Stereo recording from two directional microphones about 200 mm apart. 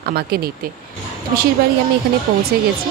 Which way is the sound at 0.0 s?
50° right (ahead or behind).